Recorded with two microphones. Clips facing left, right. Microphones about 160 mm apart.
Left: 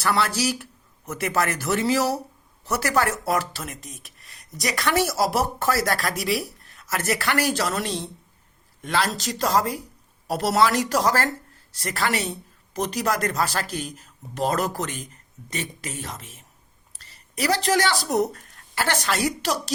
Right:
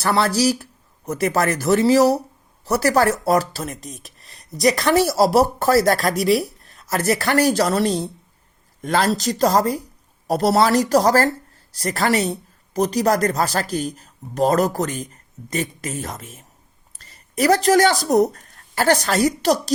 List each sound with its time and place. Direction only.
0.0 s speech: 35° right (ahead or behind)